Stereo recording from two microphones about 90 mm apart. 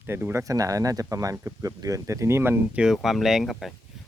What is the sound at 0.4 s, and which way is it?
Speech, 40° right (ahead or behind).